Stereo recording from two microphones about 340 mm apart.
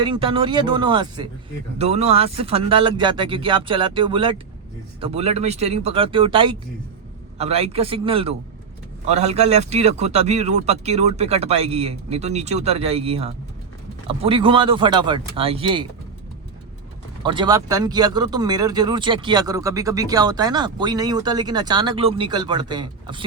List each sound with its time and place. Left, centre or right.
0.0 s a man's voice: centre
17.2 s speech: centre